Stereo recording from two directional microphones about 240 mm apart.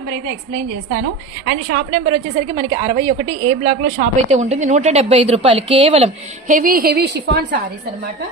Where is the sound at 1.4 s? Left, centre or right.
Right.